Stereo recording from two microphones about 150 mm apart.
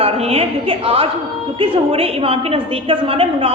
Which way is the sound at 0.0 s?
40° right (ahead or behind).